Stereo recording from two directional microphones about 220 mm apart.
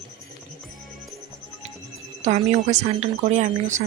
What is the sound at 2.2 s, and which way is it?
Speech, 30° right (ahead or behind).